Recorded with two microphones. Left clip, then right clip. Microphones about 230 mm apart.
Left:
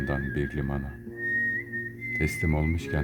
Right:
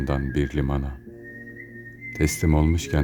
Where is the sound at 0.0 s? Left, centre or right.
Centre.